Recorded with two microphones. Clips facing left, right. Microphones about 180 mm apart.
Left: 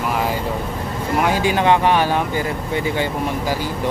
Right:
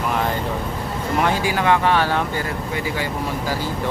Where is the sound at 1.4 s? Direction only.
20° left (ahead or behind).